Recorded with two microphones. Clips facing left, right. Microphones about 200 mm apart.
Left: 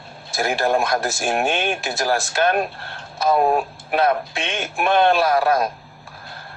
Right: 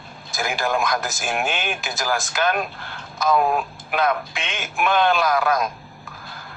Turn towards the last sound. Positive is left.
turn(degrees=35)  # may be behind; listen again after turning